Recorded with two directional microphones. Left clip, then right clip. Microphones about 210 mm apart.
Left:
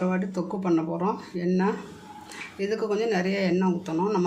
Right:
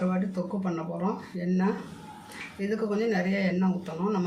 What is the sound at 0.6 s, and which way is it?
Speech, 45° left (ahead or behind).